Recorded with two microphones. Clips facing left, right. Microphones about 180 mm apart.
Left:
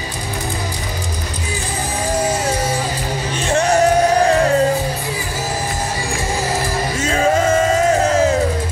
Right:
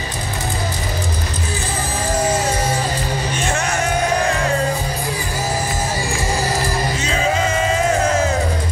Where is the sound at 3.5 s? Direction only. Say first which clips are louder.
Left 10 dB; 35° left (ahead or behind).